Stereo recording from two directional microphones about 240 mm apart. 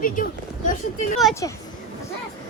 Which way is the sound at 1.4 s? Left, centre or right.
Centre.